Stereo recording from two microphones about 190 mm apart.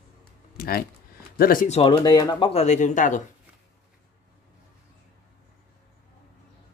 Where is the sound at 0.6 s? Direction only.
50° left (ahead or behind).